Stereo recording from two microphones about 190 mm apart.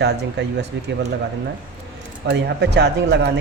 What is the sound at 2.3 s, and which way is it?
Speech, 65° right (ahead or behind).